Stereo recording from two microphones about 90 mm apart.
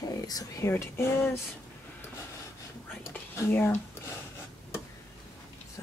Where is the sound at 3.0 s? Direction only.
25° left (ahead or behind).